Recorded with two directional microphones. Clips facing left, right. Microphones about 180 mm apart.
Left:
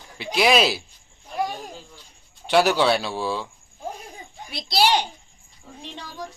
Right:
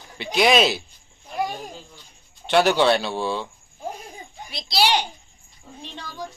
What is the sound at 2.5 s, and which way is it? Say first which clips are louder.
Speech: right 1 dB; 5° left (ahead or behind).